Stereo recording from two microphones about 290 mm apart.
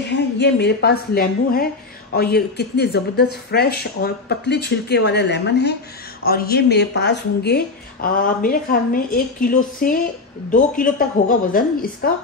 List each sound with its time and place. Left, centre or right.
0.1 s a woman's voice: left